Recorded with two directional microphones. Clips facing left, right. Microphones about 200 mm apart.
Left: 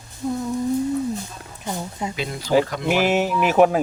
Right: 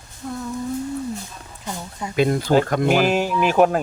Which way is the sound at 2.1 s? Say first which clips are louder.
Right 3 dB; 55° right (ahead or behind).